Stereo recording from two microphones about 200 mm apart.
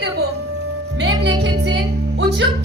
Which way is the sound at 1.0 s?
60° right (ahead or behind).